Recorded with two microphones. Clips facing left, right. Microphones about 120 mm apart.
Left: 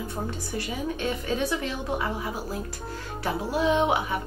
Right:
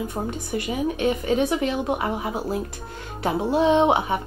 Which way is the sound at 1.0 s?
15° right (ahead or behind).